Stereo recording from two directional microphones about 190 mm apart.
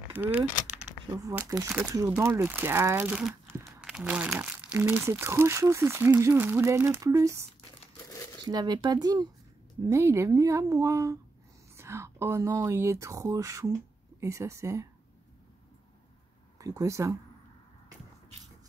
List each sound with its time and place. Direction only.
0.1 s speech: 10° right (ahead or behind)
8.5 s speech: 20° right (ahead or behind)
16.5 s speech: 15° right (ahead or behind)